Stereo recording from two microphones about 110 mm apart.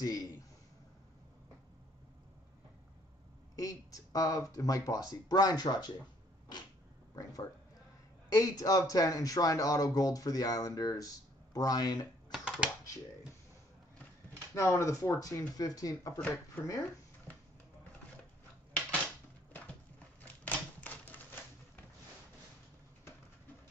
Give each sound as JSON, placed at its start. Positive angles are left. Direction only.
{"t": 0.0, "sound": "speech", "side_deg": 35}
{"t": 3.5, "sound": "speech", "side_deg": 35}
{"t": 8.4, "sound": "speech", "side_deg": 30}
{"t": 12.3, "sound": "a sound", "side_deg": -10}
{"t": 14.5, "sound": "speech", "side_deg": 25}
{"t": 16.2, "sound": "speech", "side_deg": 15}
{"t": 16.6, "sound": "speech", "side_deg": 30}
{"t": 17.3, "sound": "music", "side_deg": 15}
{"t": 20.4, "sound": "typewriter", "side_deg": 15}